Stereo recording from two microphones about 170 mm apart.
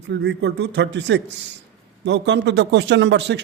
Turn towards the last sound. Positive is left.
turn(degrees=-90)